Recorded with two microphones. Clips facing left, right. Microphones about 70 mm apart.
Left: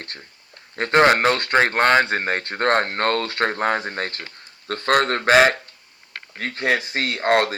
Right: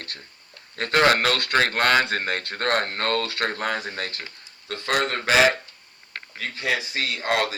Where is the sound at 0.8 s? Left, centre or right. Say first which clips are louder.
Left 4 dB; left.